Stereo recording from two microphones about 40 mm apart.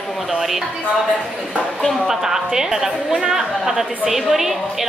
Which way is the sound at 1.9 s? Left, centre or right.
Centre.